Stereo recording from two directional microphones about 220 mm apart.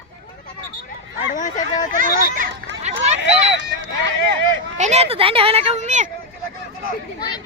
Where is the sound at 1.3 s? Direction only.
35° left (ahead or behind).